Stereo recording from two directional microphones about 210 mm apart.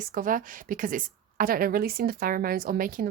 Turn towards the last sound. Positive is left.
turn(degrees=-40)  # may be behind; listen again after turning